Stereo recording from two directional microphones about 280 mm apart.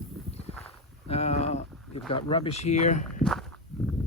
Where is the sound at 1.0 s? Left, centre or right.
Left.